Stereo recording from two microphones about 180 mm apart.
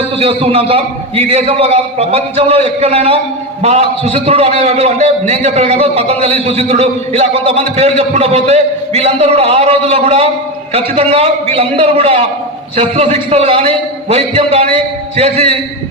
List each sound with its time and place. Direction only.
0.2 s a man's voice: 35° right (ahead or behind)